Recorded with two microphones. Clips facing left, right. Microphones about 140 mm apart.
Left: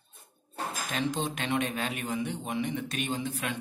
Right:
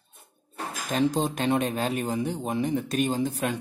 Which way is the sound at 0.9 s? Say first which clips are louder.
Right 8 dB; 35° right (ahead or behind).